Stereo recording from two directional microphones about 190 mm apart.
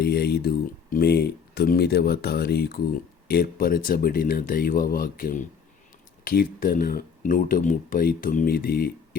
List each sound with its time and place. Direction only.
0.0 s speech: 55° left (ahead or behind)